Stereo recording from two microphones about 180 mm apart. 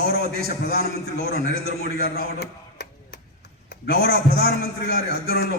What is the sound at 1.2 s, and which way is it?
Speech, 55° right (ahead or behind).